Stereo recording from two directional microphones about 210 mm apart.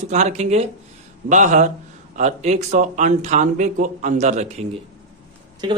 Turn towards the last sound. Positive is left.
turn(degrees=-20)  # may be behind; listen again after turning